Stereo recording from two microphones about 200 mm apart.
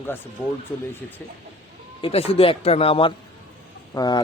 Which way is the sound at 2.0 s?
30° left (ahead or behind).